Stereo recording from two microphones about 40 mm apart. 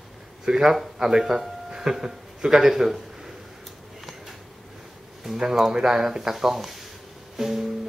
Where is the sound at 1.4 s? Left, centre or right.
Centre.